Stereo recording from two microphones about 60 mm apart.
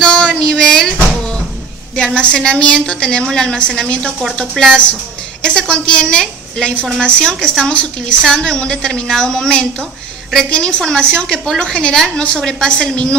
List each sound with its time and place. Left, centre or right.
0.0 s a sound: centre
2.1 s a woman's voice: centre
11.3 s a woman's voice: centre
11.6 s a woman's voice: centre